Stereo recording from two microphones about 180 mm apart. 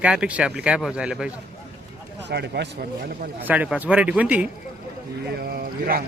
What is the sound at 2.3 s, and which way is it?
Speech, 70° right (ahead or behind).